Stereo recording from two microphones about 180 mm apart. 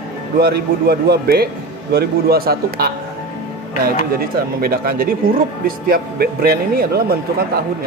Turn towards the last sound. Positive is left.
turn(degrees=-55)  # may be behind; listen again after turning